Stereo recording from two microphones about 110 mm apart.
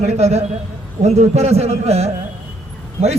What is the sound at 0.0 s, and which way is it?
A man's voice, 75° right (ahead or behind).